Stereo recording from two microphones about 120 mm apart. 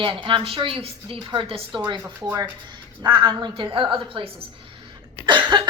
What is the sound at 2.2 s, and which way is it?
A woman's voice, 35° right (ahead or behind).